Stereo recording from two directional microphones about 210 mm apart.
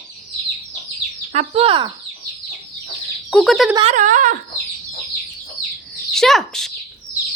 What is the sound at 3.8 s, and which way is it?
Speech, 35° right (ahead or behind).